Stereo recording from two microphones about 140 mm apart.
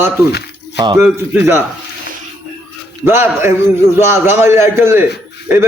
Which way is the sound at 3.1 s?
15° right (ahead or behind).